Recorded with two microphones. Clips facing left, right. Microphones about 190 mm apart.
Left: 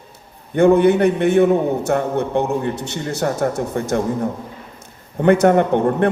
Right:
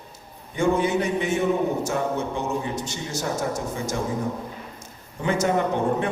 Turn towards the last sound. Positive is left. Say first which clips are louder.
# left 7 dB
turn(degrees=60)  # may be behind; listen again after turning